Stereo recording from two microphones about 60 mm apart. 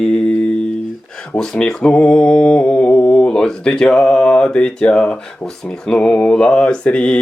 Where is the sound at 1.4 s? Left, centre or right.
Centre.